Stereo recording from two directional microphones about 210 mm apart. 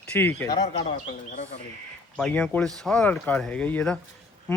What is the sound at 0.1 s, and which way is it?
Speech, 10° left (ahead or behind).